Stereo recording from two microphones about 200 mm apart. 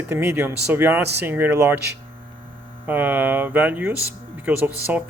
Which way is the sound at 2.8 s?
10° right (ahead or behind).